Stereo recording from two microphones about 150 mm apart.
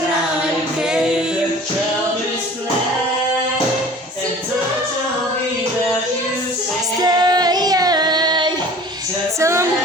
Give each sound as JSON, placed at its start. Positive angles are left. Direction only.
{"t": 7.0, "sound": "child singing", "side_deg": -25}
{"t": 9.4, "sound": "female singing", "side_deg": -20}